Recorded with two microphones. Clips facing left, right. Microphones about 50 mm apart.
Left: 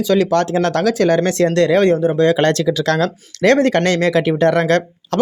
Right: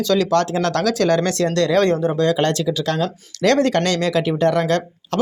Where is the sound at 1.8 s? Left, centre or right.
Centre.